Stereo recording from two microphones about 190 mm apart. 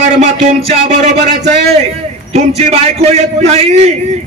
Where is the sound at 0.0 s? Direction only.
40° right (ahead or behind).